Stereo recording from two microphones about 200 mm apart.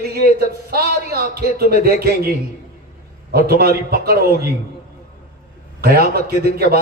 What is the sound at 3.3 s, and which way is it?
Speech, 50° right (ahead or behind).